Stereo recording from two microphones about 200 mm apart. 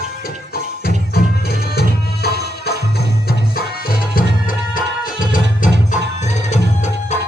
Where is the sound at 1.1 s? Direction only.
50° left (ahead or behind).